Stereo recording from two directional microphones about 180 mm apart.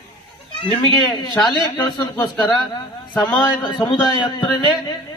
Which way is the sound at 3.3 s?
25° left (ahead or behind).